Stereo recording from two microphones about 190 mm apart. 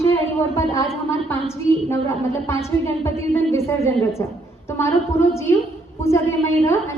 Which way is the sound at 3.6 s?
15° left (ahead or behind).